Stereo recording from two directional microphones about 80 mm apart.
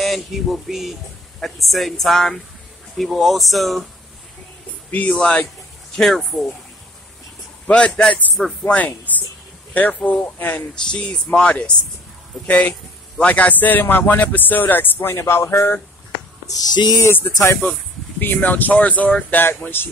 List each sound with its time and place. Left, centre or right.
0.0 s a sound: centre
4.9 s speech: centre
5.9 s a sound: centre
7.6 s a man's voice: centre; by 15.8 s left
16.4 s speech: left
17.0 s speech: left